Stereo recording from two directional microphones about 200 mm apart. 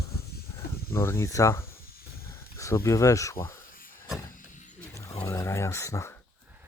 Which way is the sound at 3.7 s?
45° left (ahead or behind).